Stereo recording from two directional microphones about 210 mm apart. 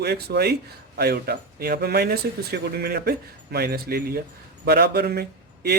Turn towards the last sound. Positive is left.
turn(degrees=-50)  # may be behind; listen again after turning